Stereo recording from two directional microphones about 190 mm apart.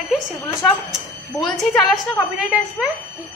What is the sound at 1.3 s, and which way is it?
Speech, 25° left (ahead or behind).